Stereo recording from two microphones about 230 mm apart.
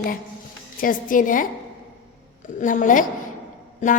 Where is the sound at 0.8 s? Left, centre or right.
Left.